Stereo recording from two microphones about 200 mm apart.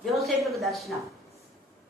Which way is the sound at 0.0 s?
Centre (ahead or behind).